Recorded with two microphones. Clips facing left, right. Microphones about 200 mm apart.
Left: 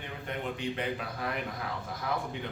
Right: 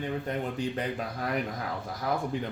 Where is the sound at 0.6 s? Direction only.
40° right (ahead or behind).